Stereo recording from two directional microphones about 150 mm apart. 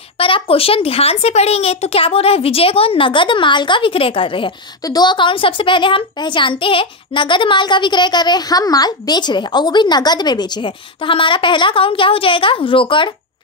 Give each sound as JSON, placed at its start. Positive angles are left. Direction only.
{"t": 0.2, "sound": "speech", "side_deg": 40}